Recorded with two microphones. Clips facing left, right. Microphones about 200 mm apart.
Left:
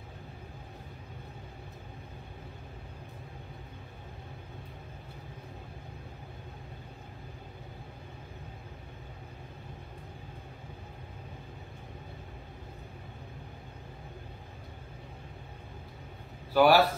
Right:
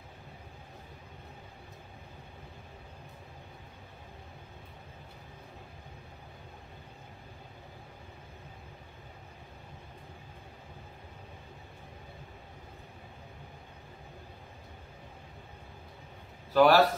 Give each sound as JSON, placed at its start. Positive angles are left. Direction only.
{"t": 16.5, "sound": "a man's voice", "side_deg": 10}